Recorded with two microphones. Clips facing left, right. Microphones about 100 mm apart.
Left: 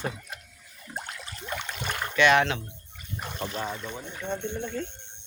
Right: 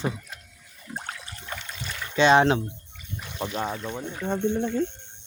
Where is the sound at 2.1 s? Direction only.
30° right (ahead or behind).